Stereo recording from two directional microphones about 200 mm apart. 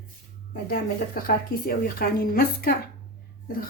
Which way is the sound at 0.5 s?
45° left (ahead or behind).